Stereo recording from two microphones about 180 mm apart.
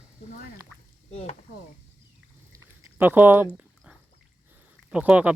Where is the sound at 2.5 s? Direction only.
15° right (ahead or behind).